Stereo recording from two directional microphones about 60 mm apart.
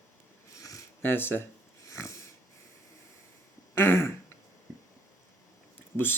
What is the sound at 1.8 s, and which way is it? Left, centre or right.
Wheeze, left.